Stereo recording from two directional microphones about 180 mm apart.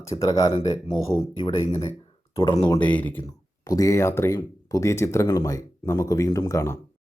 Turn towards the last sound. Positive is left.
turn(degrees=15)  # may be behind; listen again after turning